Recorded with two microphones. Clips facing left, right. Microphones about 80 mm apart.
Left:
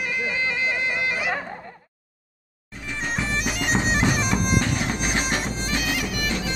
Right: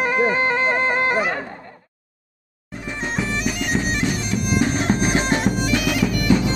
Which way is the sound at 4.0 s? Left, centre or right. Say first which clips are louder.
Left 1 dB; left.